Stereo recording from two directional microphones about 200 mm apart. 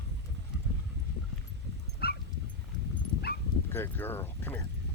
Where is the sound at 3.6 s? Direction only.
10° left (ahead or behind).